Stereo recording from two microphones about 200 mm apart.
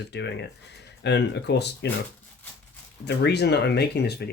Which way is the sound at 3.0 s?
55° left (ahead or behind).